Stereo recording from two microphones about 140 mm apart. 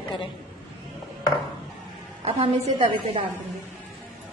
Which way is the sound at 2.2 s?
45° right (ahead or behind).